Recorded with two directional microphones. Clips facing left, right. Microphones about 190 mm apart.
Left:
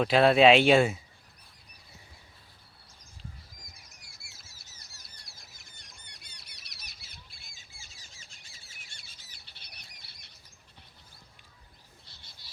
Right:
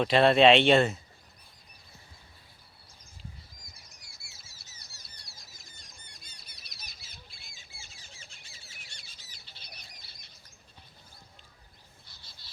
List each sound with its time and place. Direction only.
0.0 s speech: centre (ahead or behind)
4.0 s bird: 55° left (ahead or behind)
5.3 s squawk: 55° left (ahead or behind)
12.4 s insect: 15° left (ahead or behind)